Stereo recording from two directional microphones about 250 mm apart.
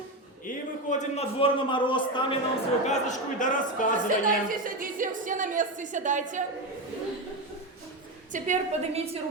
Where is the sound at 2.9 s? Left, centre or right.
Left.